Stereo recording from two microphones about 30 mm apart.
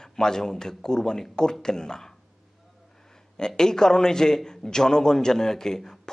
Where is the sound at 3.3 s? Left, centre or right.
Left.